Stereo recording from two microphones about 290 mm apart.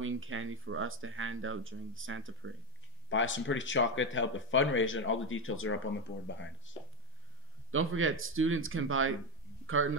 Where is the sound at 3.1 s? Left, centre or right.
Left.